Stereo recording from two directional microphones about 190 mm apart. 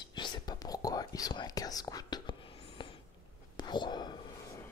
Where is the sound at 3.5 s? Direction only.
25° left (ahead or behind).